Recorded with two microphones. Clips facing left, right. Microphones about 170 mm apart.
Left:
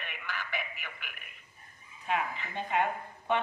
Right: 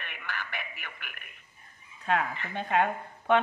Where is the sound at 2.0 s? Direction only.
65° right (ahead or behind).